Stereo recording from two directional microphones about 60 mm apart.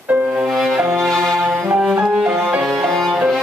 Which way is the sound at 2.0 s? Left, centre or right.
Centre.